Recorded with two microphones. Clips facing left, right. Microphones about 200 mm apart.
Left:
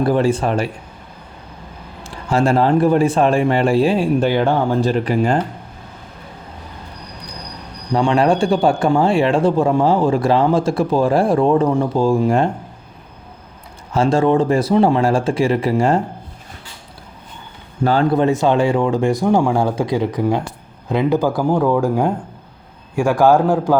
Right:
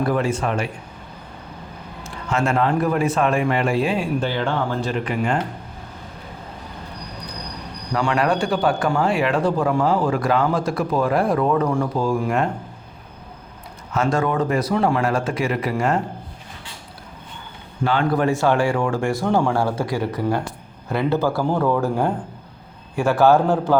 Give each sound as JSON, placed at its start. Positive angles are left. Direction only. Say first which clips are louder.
{"t": 0.0, "sound": "a man's voice", "louder": "left 5 dB", "side_deg": 30}
{"t": 2.0, "sound": "a man's voice", "louder": "left 6 dB", "side_deg": 35}
{"t": 7.9, "sound": "speech", "louder": "left 5 dB", "side_deg": 30}
{"t": 13.9, "sound": "speech", "louder": "left 6 dB", "side_deg": 30}
{"t": 18.1, "sound": "a man's voice", "louder": "left 4 dB", "side_deg": 20}